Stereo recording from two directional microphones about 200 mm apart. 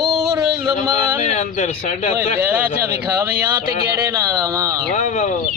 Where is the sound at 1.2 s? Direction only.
35° left (ahead or behind).